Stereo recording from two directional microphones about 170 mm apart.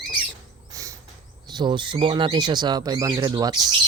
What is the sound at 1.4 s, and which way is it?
Speech, 25° right (ahead or behind).